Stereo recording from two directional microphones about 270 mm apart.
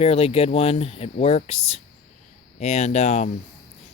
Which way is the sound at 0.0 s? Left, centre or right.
Left.